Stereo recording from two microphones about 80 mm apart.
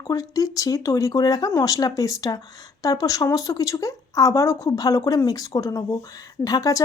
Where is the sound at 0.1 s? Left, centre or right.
Left.